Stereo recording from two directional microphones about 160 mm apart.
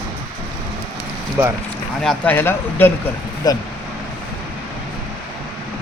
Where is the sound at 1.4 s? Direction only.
15° right (ahead or behind).